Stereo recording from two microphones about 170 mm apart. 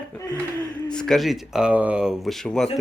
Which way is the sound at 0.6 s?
5° left (ahead or behind).